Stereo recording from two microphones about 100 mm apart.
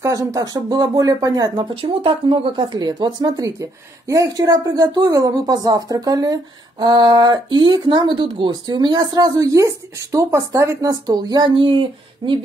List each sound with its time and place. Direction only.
0.0 s speech: 35° right (ahead or behind)
1.8 s speech: 60° right (ahead or behind); by 11.5 s 45° right (ahead or behind)
11.5 s speech: 60° right (ahead or behind)